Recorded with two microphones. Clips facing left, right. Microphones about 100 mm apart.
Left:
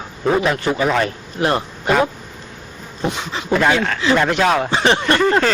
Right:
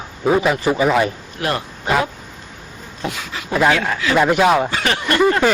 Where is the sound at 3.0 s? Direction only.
25° left (ahead or behind).